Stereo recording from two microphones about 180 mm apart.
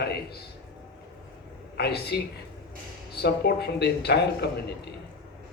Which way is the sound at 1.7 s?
65° left (ahead or behind).